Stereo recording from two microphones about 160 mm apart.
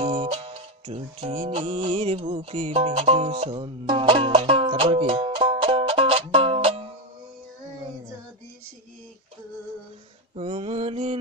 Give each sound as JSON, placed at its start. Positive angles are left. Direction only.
{"t": 0.0, "sound": "music", "side_deg": -30}
{"t": 10.3, "sound": "mantra", "side_deg": -40}